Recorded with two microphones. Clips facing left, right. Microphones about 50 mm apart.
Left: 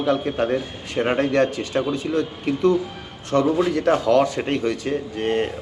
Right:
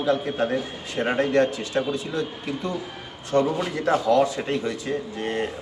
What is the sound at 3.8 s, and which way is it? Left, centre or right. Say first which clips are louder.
Speech: even; left.